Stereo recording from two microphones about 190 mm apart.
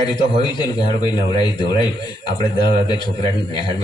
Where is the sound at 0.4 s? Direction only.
20° left (ahead or behind).